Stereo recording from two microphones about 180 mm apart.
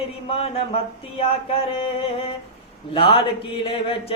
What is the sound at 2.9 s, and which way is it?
Speech, 30° left (ahead or behind).